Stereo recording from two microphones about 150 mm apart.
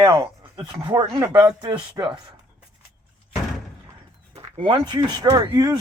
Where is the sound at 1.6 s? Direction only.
30° right (ahead or behind).